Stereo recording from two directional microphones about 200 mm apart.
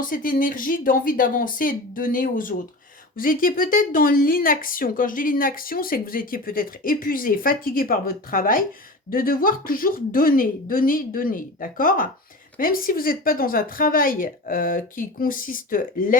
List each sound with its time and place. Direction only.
0.1 s speech: 45° left (ahead or behind)